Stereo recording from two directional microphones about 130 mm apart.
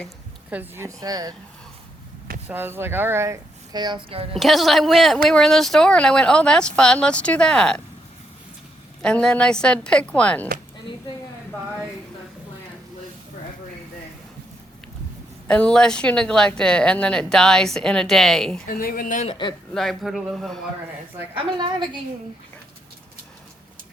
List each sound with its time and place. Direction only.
0.5 s a woman's voice: 15° right (ahead or behind)
2.5 s speech: 15° right (ahead or behind); by 4.0 s 35° right (ahead or behind)
4.1 s a woman's voice: 45° right (ahead or behind)
4.4 s speech: centre (ahead or behind)
9.0 s speech: 5° left (ahead or behind)
15.4 s speech: 5° left (ahead or behind)
18.7 s speech: 90° left
19.3 s speech: 35° left (ahead or behind)
19.7 s speech: 5° left (ahead or behind)
21.3 s a woman's voice: 40° right (ahead or behind)